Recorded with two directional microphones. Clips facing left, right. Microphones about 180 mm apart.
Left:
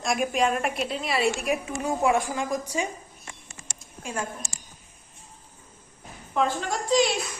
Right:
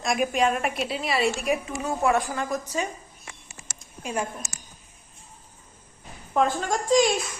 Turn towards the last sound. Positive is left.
turn(degrees=-45)  # may be behind; listen again after turning